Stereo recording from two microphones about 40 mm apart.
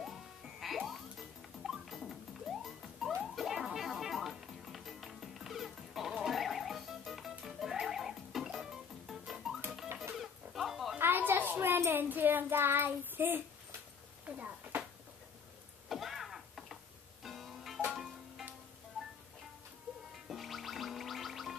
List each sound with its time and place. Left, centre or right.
0.0 s music: centre
10.1 s dog: centre
11.0 s child singing: right
14.2 s a sound: right
15.9 s a sound: centre
17.2 s music: centre
20.2 s music: centre